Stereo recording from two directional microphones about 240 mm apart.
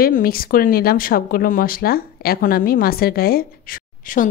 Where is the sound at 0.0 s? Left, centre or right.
Left.